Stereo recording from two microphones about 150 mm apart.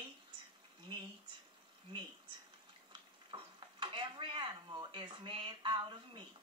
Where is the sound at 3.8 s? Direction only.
30° right (ahead or behind).